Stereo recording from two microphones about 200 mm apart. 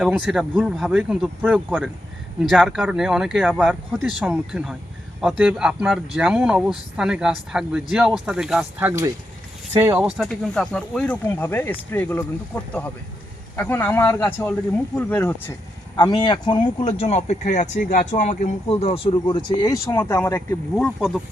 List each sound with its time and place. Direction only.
0.1 s speech: 5° right (ahead or behind)
16.0 s speech: 20° left (ahead or behind)
20.7 s speech: centre (ahead or behind)